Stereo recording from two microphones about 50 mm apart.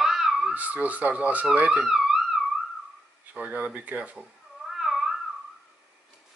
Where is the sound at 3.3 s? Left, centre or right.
Right.